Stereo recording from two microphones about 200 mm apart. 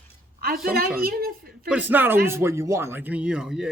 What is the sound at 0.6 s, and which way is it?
A woman's voice, 45° right (ahead or behind).